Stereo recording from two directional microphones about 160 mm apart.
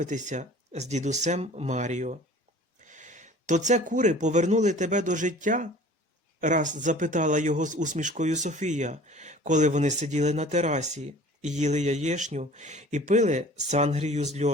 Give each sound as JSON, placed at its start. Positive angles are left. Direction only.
{"t": 0.0, "sound": "speech", "side_deg": -50}